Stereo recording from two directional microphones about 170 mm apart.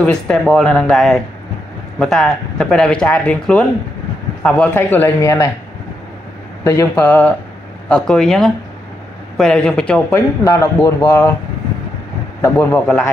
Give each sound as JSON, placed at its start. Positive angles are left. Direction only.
{"t": 0.0, "sound": "a man's voice", "side_deg": 5}
{"t": 6.6, "sound": "a man's voice", "side_deg": 15}
{"t": 10.4, "sound": "speech", "side_deg": 20}
{"t": 12.4, "sound": "a man's voice", "side_deg": 10}